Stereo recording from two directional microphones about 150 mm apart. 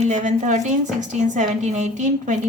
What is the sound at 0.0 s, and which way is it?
A woman's voice, 50° right (ahead or behind).